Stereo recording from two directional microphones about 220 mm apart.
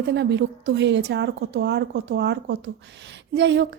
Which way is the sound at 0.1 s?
55° right (ahead or behind).